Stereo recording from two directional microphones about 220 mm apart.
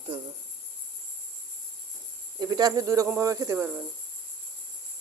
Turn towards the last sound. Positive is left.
turn(degrees=-10)  # may be behind; listen again after turning